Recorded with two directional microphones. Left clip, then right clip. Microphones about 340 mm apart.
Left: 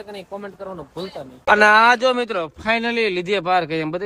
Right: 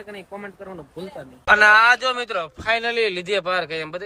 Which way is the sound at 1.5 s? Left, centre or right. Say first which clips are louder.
Left 1 dB; centre.